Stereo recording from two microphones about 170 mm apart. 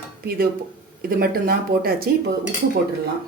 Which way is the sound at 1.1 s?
65° right (ahead or behind).